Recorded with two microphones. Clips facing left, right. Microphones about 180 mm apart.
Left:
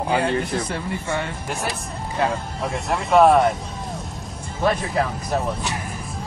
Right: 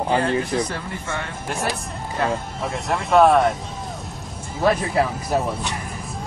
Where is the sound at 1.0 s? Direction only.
Centre (ahead or behind).